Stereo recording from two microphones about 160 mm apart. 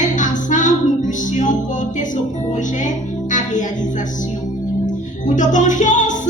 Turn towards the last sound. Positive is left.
turn(degrees=50)  # may be behind; listen again after turning